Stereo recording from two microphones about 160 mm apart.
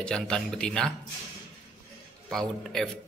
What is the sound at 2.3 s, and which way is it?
Speech, centre (ahead or behind).